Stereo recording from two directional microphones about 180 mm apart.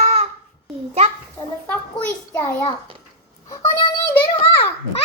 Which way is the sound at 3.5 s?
15° left (ahead or behind).